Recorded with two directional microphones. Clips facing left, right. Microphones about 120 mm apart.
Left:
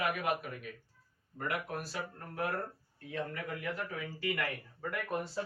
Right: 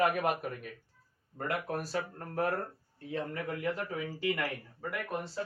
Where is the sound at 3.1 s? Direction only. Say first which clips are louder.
Right 3 dB; 30° right (ahead or behind).